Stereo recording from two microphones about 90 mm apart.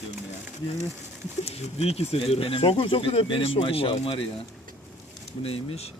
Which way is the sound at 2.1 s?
90° left.